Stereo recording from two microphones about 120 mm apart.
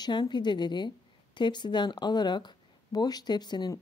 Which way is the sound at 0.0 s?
40° left (ahead or behind).